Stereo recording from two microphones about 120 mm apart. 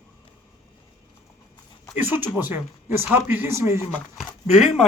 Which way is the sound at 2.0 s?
15° right (ahead or behind).